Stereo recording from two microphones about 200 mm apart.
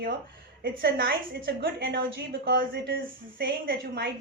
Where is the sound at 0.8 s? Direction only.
50° right (ahead or behind).